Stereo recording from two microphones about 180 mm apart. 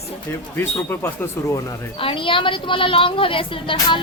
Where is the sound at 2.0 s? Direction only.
30° left (ahead or behind).